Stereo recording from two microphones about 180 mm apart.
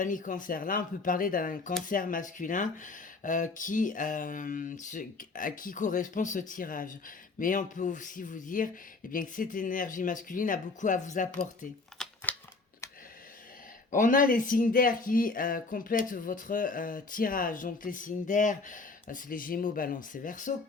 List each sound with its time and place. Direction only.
0.0 s speech: 45° left (ahead or behind)
12.0 s a sound: 5° left (ahead or behind)
13.9 s speech: 45° left (ahead or behind)